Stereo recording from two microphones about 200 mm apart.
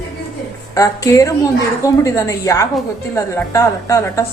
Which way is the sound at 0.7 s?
15° left (ahead or behind).